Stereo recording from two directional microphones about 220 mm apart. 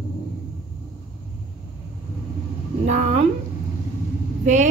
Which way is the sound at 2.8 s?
30° right (ahead or behind).